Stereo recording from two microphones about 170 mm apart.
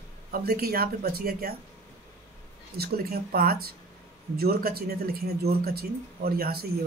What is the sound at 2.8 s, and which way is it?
Speech, 60° right (ahead or behind).